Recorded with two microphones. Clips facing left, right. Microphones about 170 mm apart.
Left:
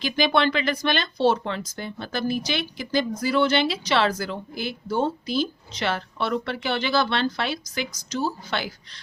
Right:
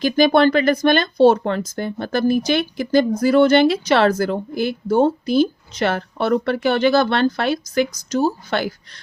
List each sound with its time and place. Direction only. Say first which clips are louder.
0.0 s speech: right 8 dB; 45° right (ahead or behind)